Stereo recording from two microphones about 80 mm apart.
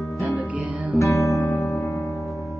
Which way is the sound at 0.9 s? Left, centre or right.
Left.